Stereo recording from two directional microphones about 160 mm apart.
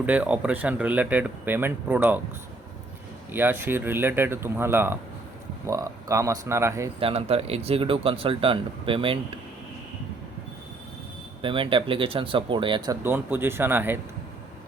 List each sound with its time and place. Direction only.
0.0 s speech: 10° right (ahead or behind)
3.3 s speech: 15° right (ahead or behind)
7.0 s speech: 40° right (ahead or behind)
11.4 s speech: 35° right (ahead or behind)
13.0 s speech: 15° right (ahead or behind)